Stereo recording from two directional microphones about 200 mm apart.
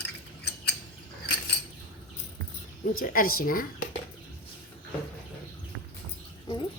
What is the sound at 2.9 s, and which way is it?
Speech, 45° left (ahead or behind).